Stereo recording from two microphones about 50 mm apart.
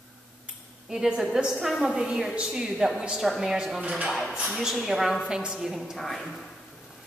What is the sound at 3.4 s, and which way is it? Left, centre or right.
A woman's voice, centre.